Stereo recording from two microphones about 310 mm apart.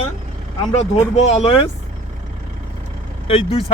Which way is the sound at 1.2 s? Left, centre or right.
Left.